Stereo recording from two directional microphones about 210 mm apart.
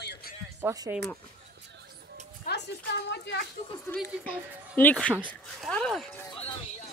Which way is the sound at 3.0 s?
55° left (ahead or behind).